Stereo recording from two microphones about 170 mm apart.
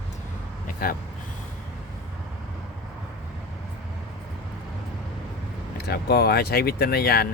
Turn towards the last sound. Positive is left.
turn(degrees=65)  # may be behind; listen again after turning